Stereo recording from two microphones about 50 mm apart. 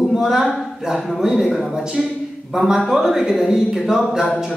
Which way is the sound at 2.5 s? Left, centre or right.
Centre.